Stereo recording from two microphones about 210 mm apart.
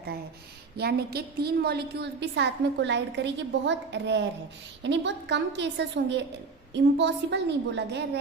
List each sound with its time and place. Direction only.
0.8 s a woman's voice: 50° right (ahead or behind)